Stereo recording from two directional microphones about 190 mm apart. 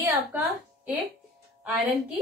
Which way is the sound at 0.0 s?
10° right (ahead or behind).